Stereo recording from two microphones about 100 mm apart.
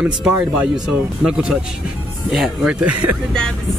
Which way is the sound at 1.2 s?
5° right (ahead or behind).